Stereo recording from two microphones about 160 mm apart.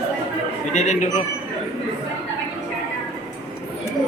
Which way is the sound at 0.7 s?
50° left (ahead or behind).